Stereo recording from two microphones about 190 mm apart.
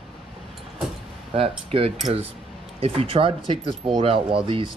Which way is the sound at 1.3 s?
30° right (ahead or behind).